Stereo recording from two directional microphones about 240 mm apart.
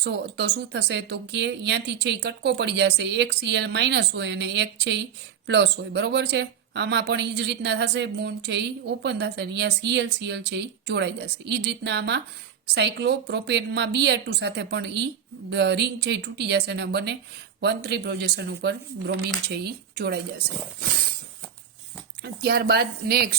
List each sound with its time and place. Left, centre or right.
0.0 s speech: right
22.2 s a woman's voice: right